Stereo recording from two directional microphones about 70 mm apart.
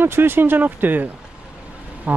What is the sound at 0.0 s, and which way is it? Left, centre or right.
Speech, right.